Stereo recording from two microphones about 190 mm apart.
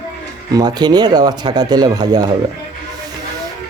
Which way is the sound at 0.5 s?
20° right (ahead or behind).